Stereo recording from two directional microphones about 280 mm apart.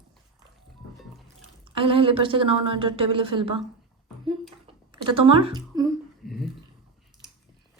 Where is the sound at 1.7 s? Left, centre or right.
Centre.